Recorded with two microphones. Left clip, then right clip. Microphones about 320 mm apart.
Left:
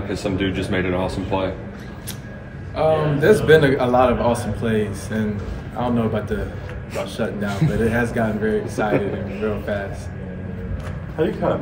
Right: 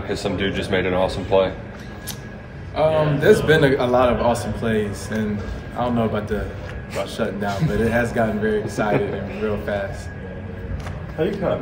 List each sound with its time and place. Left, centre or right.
0.1 s speech: right
2.7 s a man's voice: centre